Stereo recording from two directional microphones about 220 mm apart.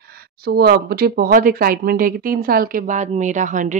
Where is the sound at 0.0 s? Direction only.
45° right (ahead or behind).